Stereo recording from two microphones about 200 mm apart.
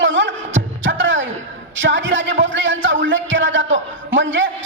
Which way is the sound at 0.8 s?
65° right (ahead or behind).